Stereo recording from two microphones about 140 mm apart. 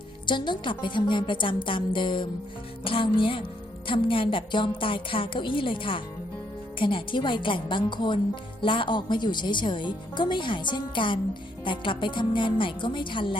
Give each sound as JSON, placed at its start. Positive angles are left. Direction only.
{"t": 0.3, "sound": "a woman's voice", "side_deg": 35}